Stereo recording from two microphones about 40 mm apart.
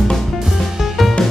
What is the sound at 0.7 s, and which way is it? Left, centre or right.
Music, centre.